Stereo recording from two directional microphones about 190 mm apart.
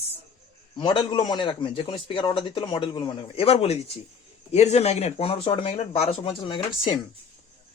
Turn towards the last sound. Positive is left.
turn(degrees=25)  # may be behind; listen again after turning